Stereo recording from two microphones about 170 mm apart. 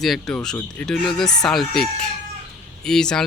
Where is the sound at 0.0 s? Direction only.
Centre (ahead or behind).